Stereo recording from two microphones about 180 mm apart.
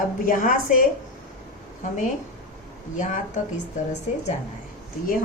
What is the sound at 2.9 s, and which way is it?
Speech, 45° left (ahead or behind).